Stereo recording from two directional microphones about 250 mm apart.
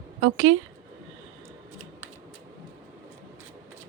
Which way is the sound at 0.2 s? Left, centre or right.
Right.